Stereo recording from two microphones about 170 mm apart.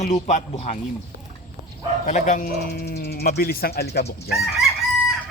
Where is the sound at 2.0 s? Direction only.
45° left (ahead or behind); by 4.0 s 70° left (ahead or behind).